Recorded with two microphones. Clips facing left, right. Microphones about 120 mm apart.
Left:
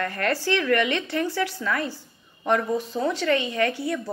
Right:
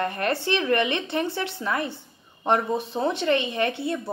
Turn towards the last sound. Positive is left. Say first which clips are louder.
# left 1 dB
turn(degrees=-25)  # may be behind; listen again after turning